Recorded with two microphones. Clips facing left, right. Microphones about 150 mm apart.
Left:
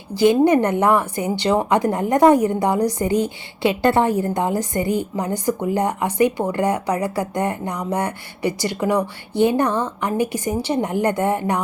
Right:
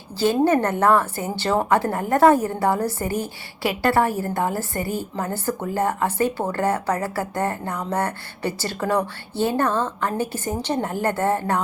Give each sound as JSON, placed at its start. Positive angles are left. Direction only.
{"t": 0.1, "sound": "speech", "side_deg": 15}